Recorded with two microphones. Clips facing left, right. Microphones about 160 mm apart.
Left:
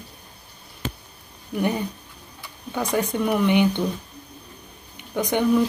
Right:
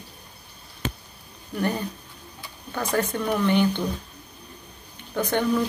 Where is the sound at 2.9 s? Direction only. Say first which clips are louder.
Left 2 dB; 10° left (ahead or behind).